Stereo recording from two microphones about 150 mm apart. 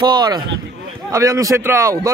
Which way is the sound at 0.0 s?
30° right (ahead or behind).